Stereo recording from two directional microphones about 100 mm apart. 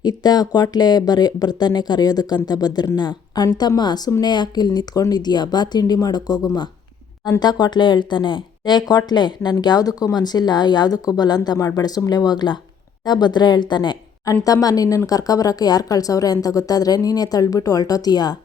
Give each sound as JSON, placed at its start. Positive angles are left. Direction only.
{"t": 0.0, "sound": "speech", "side_deg": 45}
{"t": 14.3, "sound": "speech", "side_deg": 35}